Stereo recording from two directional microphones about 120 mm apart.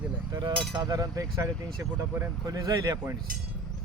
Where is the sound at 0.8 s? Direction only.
30° right (ahead or behind).